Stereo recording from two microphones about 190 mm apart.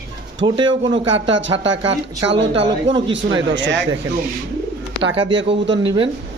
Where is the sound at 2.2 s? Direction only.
70° right (ahead or behind).